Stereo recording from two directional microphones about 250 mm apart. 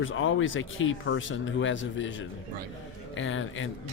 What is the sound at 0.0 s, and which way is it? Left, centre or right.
Speech, left.